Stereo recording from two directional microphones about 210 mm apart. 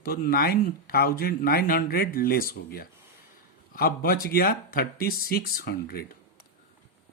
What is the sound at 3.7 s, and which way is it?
Speech, 45° left (ahead or behind).